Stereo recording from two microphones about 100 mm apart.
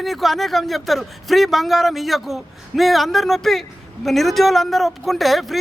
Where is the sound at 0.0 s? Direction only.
Centre (ahead or behind).